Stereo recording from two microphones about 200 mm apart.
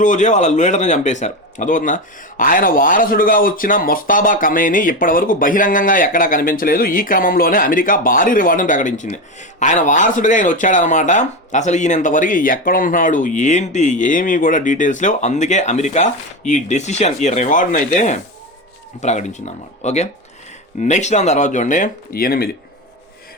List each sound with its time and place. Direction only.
0.0 s speech: 40° left (ahead or behind)